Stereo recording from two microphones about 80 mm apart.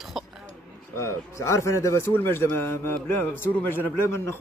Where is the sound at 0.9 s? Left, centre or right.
Left.